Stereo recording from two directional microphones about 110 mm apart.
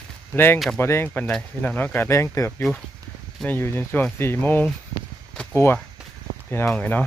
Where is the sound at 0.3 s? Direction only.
20° left (ahead or behind).